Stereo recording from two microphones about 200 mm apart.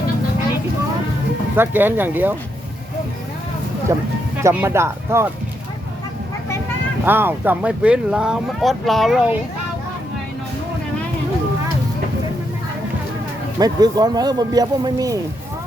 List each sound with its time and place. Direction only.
1.5 s speech: 10° right (ahead or behind)
3.9 s speech: 15° right (ahead or behind)
7.0 s speech: 10° right (ahead or behind)
13.6 s speech: 20° right (ahead or behind)